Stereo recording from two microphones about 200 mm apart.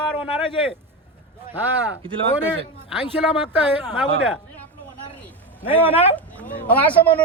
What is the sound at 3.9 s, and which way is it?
Speech, centre (ahead or behind).